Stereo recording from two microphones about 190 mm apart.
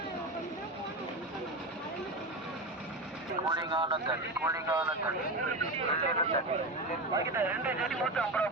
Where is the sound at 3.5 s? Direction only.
25° right (ahead or behind).